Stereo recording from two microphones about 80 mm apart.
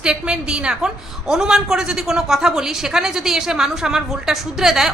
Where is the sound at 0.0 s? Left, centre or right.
Centre.